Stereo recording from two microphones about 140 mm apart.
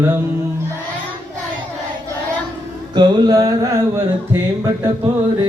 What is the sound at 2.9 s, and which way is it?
Music, 30° right (ahead or behind).